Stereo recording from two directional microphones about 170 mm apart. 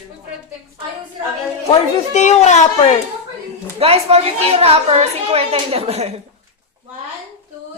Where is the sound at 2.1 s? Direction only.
45° left (ahead or behind).